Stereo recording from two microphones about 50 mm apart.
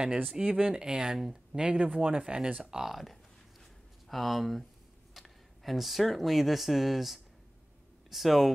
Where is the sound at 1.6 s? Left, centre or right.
Right.